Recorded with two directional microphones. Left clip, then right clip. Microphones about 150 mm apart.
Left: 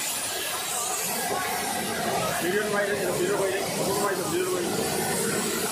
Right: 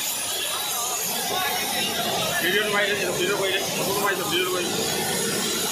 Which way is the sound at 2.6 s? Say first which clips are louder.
Right 3 dB; 25° left (ahead or behind).